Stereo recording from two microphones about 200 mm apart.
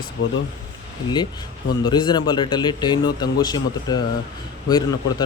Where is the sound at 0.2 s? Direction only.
70° left (ahead or behind).